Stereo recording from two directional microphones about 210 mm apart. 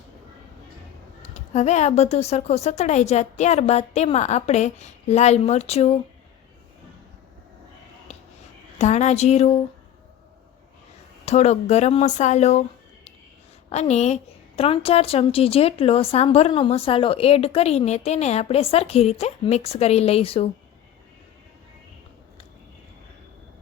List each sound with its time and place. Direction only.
1.3 s speech: 35° left (ahead or behind)
8.1 s a sound: 30° left (ahead or behind)
8.8 s speech: 35° left (ahead or behind)
11.3 s speech: 30° left (ahead or behind)
13.7 s a woman's voice: 30° left (ahead or behind)